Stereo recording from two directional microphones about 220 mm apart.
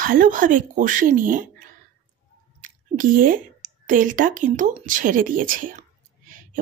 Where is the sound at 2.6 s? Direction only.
35° right (ahead or behind).